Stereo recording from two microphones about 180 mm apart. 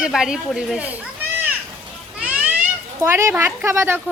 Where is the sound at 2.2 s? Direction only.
5° right (ahead or behind).